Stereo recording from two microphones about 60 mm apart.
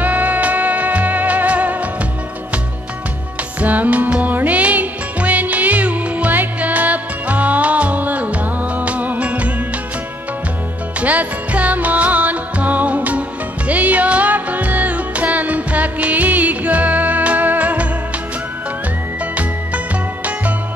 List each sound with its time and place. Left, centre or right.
0.0 s music: right
3.6 s music: right
11.0 s music: right